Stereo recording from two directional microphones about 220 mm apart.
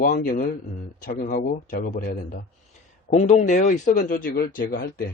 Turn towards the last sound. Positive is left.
turn(degrees=45)  # may be behind; listen again after turning